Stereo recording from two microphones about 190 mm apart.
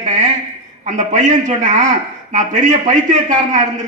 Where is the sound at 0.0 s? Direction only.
40° right (ahead or behind).